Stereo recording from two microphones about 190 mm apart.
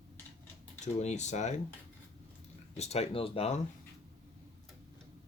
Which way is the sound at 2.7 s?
35° left (ahead or behind).